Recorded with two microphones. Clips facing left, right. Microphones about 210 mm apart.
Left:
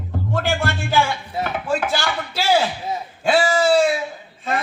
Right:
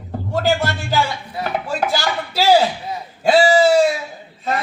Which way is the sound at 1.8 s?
40° right (ahead or behind).